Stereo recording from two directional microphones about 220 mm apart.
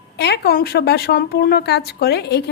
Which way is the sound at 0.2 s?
45° left (ahead or behind).